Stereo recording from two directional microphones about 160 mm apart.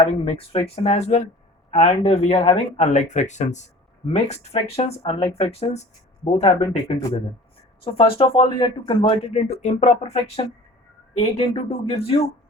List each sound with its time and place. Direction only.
0.0 s speech: 35° left (ahead or behind)
7.9 s speech: 35° left (ahead or behind)